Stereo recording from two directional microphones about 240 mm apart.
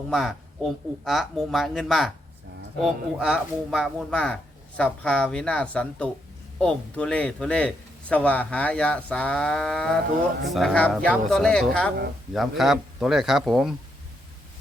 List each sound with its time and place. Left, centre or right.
0.1 s speech: centre